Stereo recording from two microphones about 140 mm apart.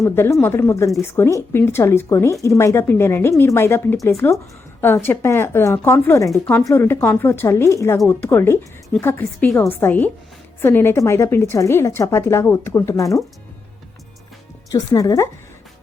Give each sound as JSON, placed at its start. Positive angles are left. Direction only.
{"t": 0.0, "sound": "speech", "side_deg": 20}
{"t": 14.7, "sound": "speech", "side_deg": 25}